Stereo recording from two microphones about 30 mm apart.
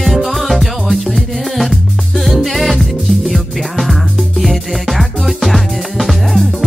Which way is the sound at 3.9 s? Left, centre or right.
Centre.